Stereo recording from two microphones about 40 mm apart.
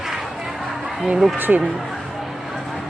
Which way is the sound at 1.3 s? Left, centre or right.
Right.